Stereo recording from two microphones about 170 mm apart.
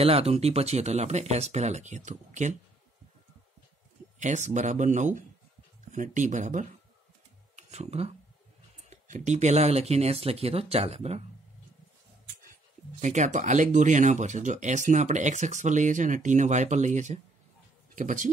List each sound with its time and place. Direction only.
0.0 s speech: 35° right (ahead or behind)
4.2 s speech: 45° right (ahead or behind)
13.0 s speech: 45° right (ahead or behind)